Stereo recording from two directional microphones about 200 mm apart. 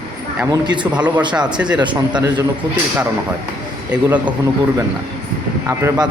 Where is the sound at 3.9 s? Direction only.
5° right (ahead or behind).